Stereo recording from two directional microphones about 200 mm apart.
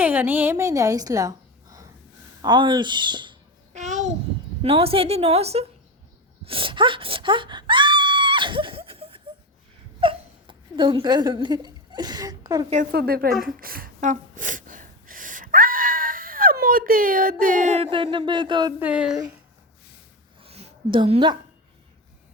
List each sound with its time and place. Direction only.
0.0 s a woman's voice: 10° right (ahead or behind)
3.8 s babbling: 35° right (ahead or behind)
4.6 s a woman's voice: 30° right (ahead or behind)
6.4 s screaming: 25° right (ahead or behind)
10.0 s a sound: 25° right (ahead or behind)
12.7 s speech: 45° right (ahead or behind)
13.6 s gasp: 45° right (ahead or behind)
17.8 s speech: 25° right (ahead or behind)
18.8 s speech: 5° right (ahead or behind)
20.4 s a sound: 30° right (ahead or behind)